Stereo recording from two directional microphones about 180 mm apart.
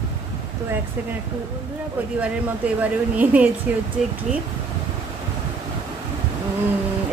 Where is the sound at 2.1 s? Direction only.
10° right (ahead or behind).